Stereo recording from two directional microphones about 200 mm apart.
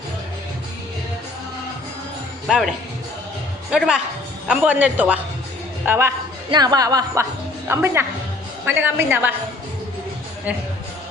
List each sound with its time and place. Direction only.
2.5 s a woman's voice: 5° right (ahead or behind)
3.7 s a woman's voice: 5° right (ahead or behind)